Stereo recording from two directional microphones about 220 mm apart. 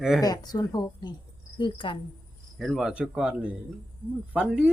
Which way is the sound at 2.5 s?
Centre (ahead or behind).